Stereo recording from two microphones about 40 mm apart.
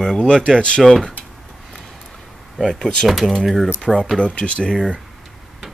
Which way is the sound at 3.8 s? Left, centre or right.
Left.